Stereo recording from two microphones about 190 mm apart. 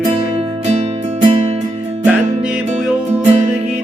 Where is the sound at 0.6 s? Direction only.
35° right (ahead or behind).